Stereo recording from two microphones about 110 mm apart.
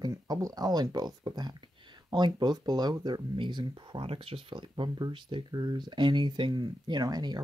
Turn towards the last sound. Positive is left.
turn(degrees=-40)  # may be behind; listen again after turning